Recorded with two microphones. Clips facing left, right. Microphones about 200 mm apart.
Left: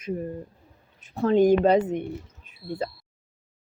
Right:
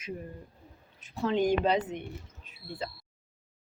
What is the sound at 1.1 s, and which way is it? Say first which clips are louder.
Speech: left 8 dB; 50° left (ahead or behind).